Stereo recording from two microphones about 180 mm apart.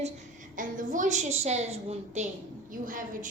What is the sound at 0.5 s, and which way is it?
A woman's voice, 45° right (ahead or behind).